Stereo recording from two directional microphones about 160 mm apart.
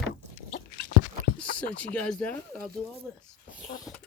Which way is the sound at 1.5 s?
10° left (ahead or behind).